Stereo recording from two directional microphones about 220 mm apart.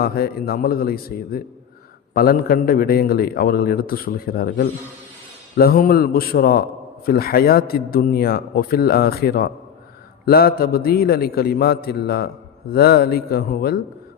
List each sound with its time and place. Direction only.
0.0 s a man's voice: 45° left (ahead or behind)